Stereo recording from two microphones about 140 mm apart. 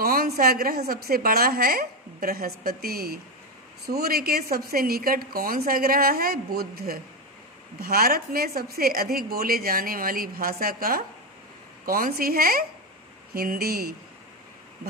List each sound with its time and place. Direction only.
0.0 s a woman's voice: 90° right